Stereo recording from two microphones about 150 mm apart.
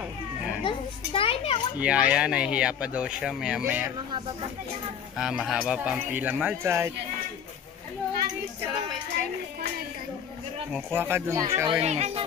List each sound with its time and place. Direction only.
0.7 s a sound: 35° left (ahead or behind)
1.8 s speech: 10° right (ahead or behind)
5.1 s speech: 5° right (ahead or behind)
11.0 s speech: 15° right (ahead or behind)
11.8 s speech: 45° right (ahead or behind)